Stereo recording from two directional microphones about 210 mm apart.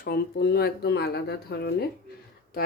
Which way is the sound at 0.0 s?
50° left (ahead or behind).